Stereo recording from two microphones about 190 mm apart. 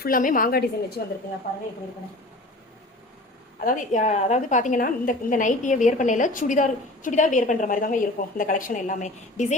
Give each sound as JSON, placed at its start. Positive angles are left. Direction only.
{"t": 0.0, "sound": "a woman's voice", "side_deg": 45}
{"t": 3.6, "sound": "a woman's voice", "side_deg": 45}